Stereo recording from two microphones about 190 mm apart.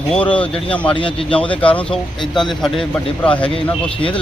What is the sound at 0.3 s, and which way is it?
Speech, 5° left (ahead or behind).